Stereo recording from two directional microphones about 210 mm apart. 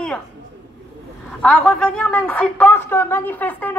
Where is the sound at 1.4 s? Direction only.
5° left (ahead or behind).